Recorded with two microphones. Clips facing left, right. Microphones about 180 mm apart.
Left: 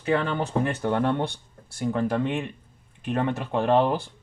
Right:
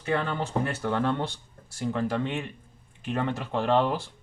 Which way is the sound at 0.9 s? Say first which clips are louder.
Left 2 dB; 55° left (ahead or behind).